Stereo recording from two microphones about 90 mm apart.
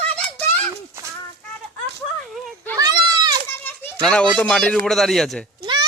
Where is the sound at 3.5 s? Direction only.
25° left (ahead or behind).